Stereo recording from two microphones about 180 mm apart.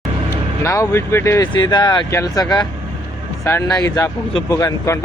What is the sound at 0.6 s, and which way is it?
Speech, 15° left (ahead or behind).